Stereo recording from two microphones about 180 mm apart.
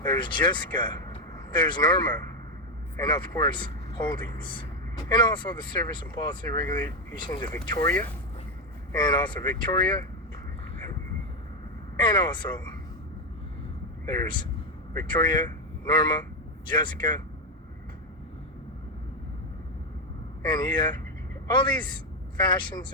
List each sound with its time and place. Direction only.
0.0 s speech: 25° left (ahead or behind)
12.0 s speech: 25° left (ahead or behind)
14.0 s speech: 20° left (ahead or behind)
20.4 s a man's voice: 25° left (ahead or behind)